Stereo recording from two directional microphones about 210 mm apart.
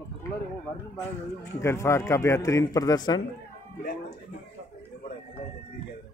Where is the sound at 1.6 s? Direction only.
15° left (ahead or behind).